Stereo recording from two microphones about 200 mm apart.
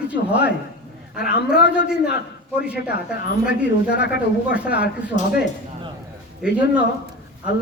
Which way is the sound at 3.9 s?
55° left (ahead or behind).